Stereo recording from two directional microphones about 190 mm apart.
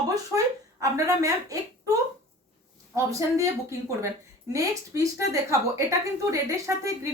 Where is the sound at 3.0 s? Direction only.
15° right (ahead or behind).